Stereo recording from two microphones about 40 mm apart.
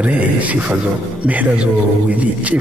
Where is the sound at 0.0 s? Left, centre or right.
Right.